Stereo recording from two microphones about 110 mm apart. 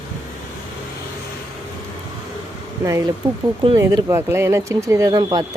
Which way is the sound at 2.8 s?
30° right (ahead or behind).